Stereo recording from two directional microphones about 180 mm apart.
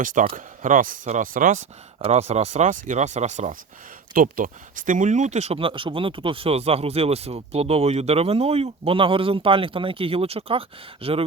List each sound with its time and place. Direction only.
0.0 s speech: 45° right (ahead or behind)
2.0 s speech: 35° right (ahead or behind)